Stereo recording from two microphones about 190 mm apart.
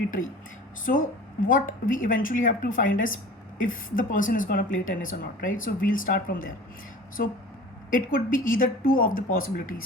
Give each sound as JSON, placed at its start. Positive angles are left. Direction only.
{"t": 0.9, "sound": "speech", "side_deg": 45}
{"t": 7.9, "sound": "speech", "side_deg": 45}